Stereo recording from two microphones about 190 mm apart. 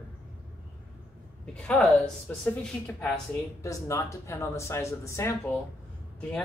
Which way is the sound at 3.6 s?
15° left (ahead or behind).